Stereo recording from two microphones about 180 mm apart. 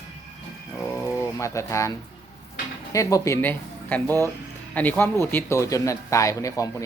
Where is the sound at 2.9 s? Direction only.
15° left (ahead or behind).